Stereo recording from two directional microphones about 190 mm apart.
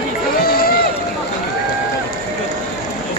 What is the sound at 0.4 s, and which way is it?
Run, 50° left (ahead or behind).